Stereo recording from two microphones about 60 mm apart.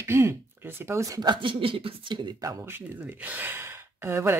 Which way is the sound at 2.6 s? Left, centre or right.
Right.